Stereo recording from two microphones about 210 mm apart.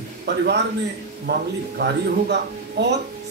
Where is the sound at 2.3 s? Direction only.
55° right (ahead or behind).